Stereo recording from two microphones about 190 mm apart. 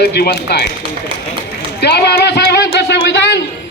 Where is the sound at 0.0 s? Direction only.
55° left (ahead or behind).